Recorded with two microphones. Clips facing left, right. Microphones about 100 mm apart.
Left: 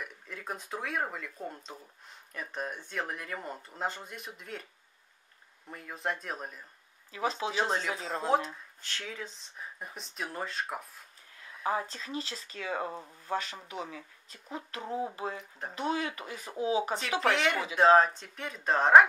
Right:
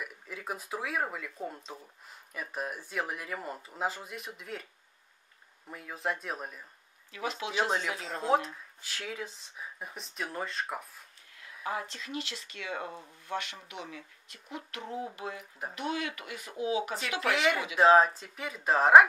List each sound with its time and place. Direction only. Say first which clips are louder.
0.0 s speech: right 1 dB; 5° right (ahead or behind)
5.7 s speech: right 1 dB; centre (ahead or behind)
7.1 s speech: left 4 dB; 35° left (ahead or behind)
7.5 s speech: even; centre (ahead or behind)
7.9 s speech: left 2 dB; 35° left (ahead or behind)
8.8 s speech: right 1 dB; 5° right (ahead or behind)
11.6 s speech: left 4 dB; 35° left (ahead or behind)
17.2 s speech: right 1 dB; centre (ahead or behind)